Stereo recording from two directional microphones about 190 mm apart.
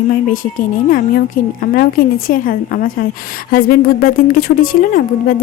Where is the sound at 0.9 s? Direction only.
50° left (ahead or behind).